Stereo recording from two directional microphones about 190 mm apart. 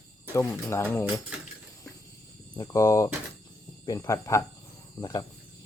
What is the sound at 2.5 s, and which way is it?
Speech, 20° left (ahead or behind).